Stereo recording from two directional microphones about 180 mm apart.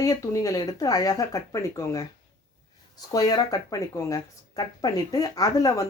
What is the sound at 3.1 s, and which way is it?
Speech, 20° left (ahead or behind).